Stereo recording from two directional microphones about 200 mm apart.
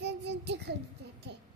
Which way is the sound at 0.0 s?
60° right (ahead or behind).